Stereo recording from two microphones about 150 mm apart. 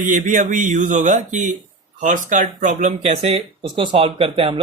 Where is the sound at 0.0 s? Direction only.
60° right (ahead or behind).